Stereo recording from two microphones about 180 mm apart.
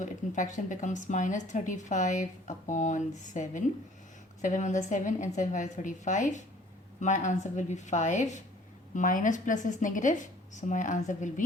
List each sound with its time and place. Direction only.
0.0 s a woman's voice: 45° left (ahead or behind)